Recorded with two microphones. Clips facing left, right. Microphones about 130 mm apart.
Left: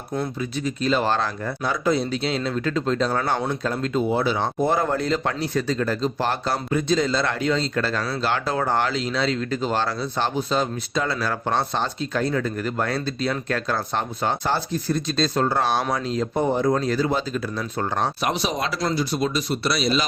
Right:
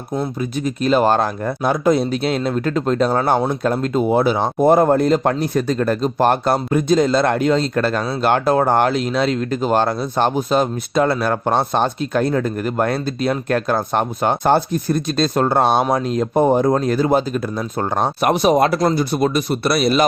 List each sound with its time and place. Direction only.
0.2 s speech: 45° right (ahead or behind)